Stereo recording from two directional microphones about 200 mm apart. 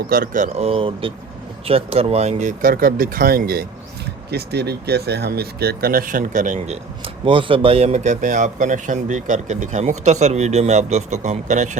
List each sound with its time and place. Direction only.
0.1 s speech: 40° right (ahead or behind)